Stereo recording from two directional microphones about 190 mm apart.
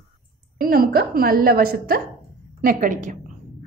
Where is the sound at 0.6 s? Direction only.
50° right (ahead or behind).